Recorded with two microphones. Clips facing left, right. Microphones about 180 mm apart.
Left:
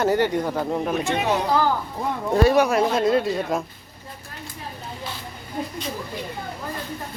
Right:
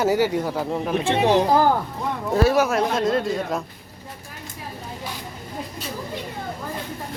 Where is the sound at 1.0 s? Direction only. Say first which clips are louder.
Right 4 dB; 30° right (ahead or behind).